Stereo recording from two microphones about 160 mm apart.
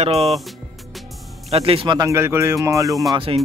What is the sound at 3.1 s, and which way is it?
Speech, 35° right (ahead or behind).